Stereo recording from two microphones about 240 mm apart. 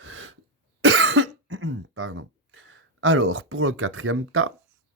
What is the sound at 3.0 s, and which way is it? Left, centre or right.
Speech, right.